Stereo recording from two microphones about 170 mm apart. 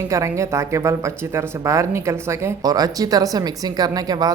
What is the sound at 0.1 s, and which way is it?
Speech, 15° right (ahead or behind).